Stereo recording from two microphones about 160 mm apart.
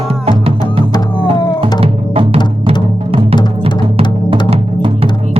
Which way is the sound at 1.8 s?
40° right (ahead or behind).